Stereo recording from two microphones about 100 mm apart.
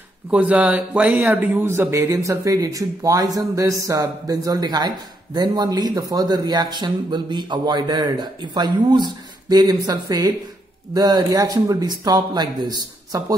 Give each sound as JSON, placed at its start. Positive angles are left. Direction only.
{"t": 0.3, "sound": "speech", "side_deg": -15}